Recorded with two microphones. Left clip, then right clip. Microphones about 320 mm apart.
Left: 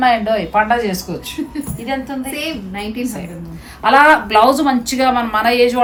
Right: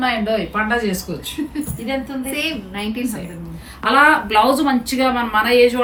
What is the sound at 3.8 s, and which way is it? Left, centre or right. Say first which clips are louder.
Speech: left 3 dB; centre.